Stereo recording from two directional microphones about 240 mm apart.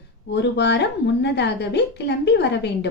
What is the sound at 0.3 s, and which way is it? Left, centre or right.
A woman's voice, left.